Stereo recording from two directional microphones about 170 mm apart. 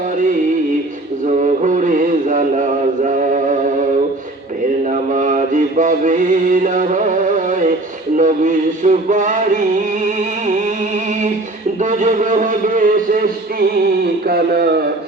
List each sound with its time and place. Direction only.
1.3 s music: 45° right (ahead or behind)
4.9 s mantra: 50° right (ahead or behind)
8.1 s a man's voice: 50° right (ahead or behind)
11.8 s a man's voice: 45° right (ahead or behind); by 14.7 s 65° right (ahead or behind)